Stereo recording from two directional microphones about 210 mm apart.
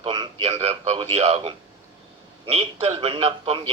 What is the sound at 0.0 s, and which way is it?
A man's voice, 25° right (ahead or behind).